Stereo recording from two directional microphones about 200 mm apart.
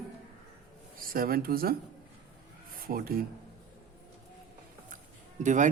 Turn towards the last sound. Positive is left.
turn(degrees=-40)  # may be behind; listen again after turning